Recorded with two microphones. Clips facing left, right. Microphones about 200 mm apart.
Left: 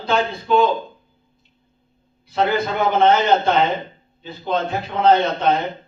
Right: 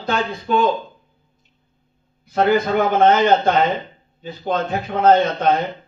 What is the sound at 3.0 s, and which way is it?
A man's voice, 50° right (ahead or behind).